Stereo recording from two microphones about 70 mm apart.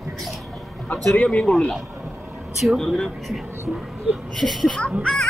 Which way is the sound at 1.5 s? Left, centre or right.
Centre.